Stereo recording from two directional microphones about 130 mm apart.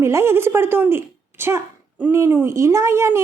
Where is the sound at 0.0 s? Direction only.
20° right (ahead or behind).